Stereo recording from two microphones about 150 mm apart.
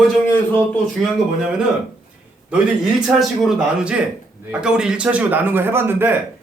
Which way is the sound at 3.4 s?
5° right (ahead or behind).